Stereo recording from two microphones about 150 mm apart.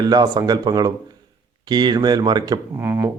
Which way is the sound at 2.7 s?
15° right (ahead or behind).